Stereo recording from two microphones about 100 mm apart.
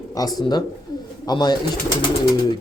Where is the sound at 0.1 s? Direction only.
40° left (ahead or behind).